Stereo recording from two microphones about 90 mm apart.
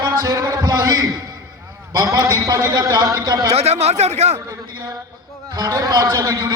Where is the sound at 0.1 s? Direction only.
35° right (ahead or behind).